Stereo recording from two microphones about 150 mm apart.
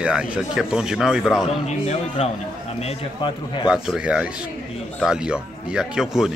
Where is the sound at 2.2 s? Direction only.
40° left (ahead or behind).